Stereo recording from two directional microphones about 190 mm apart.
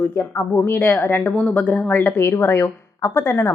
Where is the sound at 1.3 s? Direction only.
5° left (ahead or behind).